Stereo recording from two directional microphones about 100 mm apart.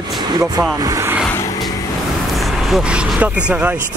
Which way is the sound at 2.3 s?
Centre (ahead or behind).